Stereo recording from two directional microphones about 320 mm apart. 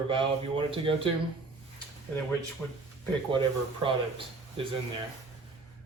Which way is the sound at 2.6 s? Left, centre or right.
Centre.